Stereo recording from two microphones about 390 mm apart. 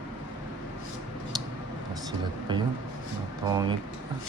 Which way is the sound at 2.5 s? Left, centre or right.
Centre.